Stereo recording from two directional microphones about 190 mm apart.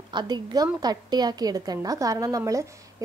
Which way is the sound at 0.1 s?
20° right (ahead or behind).